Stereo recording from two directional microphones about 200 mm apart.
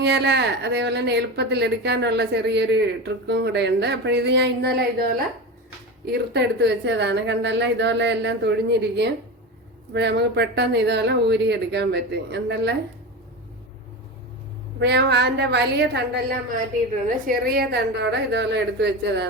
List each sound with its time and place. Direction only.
0.0 s speech: 60° right (ahead or behind)
6.1 s speech: 55° right (ahead or behind)
14.8 s speech: 55° right (ahead or behind)
17.2 s speech: 50° right (ahead or behind)